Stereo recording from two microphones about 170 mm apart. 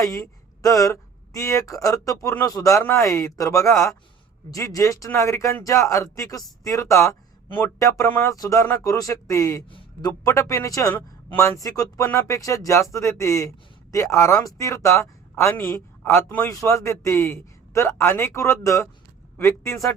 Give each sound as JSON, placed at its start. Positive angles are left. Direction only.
{"t": 0.0, "sound": "a man's voice", "side_deg": 20}